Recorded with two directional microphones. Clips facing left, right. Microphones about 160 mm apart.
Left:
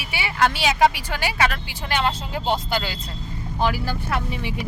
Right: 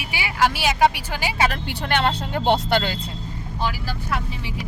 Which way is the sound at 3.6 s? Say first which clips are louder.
Left 4 dB; 55° left (ahead or behind).